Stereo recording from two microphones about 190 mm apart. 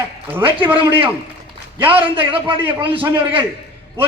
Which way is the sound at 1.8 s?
25° right (ahead or behind).